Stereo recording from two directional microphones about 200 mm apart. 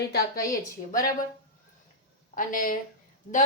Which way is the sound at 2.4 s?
45° left (ahead or behind).